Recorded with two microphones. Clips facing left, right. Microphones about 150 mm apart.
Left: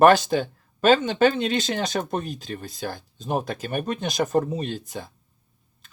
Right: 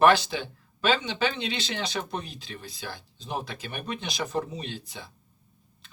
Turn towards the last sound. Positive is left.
turn(degrees=45)  # may be behind; listen again after turning